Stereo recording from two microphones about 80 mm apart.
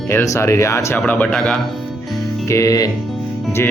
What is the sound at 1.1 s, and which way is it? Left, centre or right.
Speech, centre.